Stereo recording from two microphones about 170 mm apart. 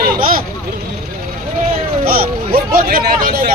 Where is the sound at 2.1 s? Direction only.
60° right (ahead or behind).